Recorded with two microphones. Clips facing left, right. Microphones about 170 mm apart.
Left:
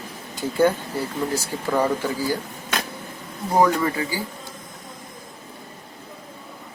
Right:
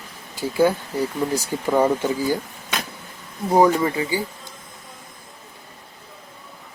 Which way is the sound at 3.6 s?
20° right (ahead or behind).